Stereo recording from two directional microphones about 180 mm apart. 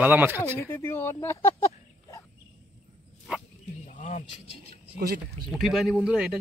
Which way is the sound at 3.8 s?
40° left (ahead or behind).